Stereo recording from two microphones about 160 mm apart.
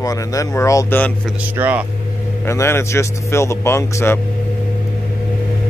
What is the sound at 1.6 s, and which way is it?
Speech, 10° right (ahead or behind).